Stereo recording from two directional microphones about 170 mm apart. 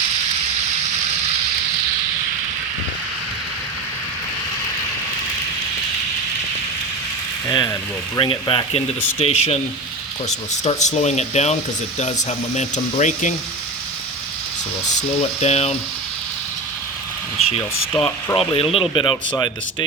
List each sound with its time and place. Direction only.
7.5 s speech: 25° left (ahead or behind); by 11.5 s 40° left (ahead or behind)
12.5 s speech: 45° left (ahead or behind)
15.4 s speech: 40° left (ahead or behind)
17.4 s a sound: 35° left (ahead or behind)
17.9 s speech: 15° left (ahead or behind)
18.3 s speech: 30° left (ahead or behind)